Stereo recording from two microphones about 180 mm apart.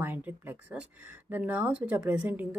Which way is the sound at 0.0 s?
10° right (ahead or behind).